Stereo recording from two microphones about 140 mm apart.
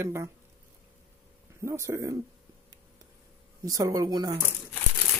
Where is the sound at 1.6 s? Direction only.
20° right (ahead or behind).